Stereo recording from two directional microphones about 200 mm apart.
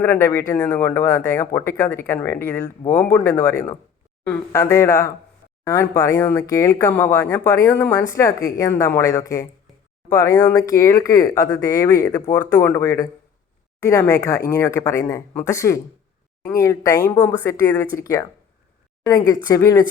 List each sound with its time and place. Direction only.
0.0 s speech: 15° left (ahead or behind)